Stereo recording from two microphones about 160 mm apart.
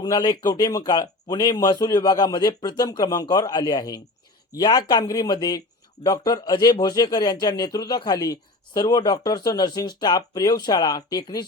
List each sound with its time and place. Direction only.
0.0 s speech: 25° left (ahead or behind)